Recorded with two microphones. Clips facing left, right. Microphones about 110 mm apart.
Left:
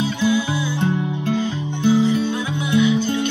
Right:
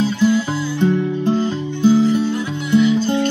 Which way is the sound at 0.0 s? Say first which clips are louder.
Right 4 dB; 15° left (ahead or behind).